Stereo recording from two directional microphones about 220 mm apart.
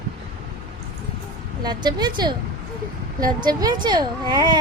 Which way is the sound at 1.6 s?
20° right (ahead or behind).